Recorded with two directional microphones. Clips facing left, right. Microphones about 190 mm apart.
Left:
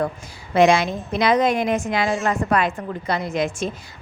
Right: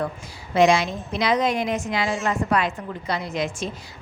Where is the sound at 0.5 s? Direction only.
55° left (ahead or behind).